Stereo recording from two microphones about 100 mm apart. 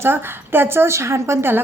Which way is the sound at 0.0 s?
20° right (ahead or behind).